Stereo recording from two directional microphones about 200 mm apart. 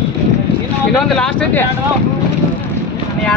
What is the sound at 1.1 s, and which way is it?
Speech, 5° left (ahead or behind).